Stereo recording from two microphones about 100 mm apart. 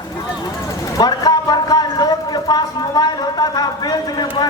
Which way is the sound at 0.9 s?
40° left (ahead or behind).